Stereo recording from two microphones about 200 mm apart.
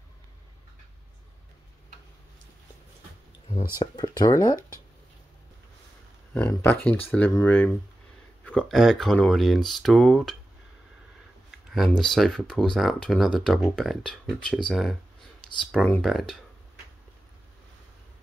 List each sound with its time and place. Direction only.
3.8 s speech: 20° left (ahead or behind)
6.3 s speech: 10° left (ahead or behind)
12.1 s speech: centre (ahead or behind)